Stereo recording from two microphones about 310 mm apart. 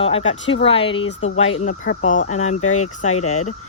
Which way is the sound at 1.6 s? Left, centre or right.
Left.